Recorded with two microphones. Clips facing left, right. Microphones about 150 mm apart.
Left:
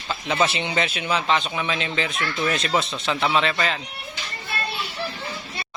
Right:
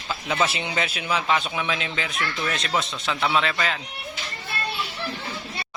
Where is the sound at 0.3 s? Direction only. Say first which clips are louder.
Left 3 dB; centre (ahead or behind).